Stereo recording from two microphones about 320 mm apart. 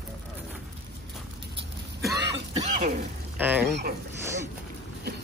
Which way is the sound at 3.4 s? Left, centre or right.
Centre.